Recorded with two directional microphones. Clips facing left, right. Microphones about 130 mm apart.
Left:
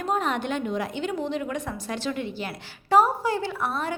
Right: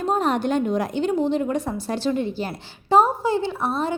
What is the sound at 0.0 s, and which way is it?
A woman's voice, 35° right (ahead or behind).